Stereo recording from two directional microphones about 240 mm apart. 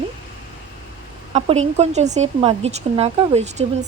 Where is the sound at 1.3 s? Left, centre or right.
Right.